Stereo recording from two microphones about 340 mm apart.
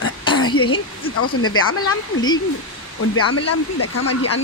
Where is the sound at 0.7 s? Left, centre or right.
Left.